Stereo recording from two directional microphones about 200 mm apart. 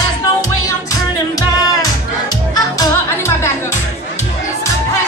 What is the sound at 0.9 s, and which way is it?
Music, 20° left (ahead or behind).